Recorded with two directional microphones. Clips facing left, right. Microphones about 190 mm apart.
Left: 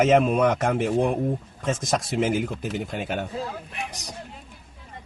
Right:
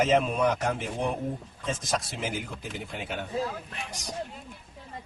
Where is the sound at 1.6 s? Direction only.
80° left; by 3.2 s 60° left (ahead or behind).